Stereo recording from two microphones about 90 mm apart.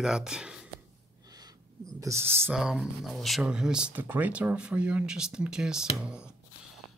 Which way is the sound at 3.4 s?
10° right (ahead or behind).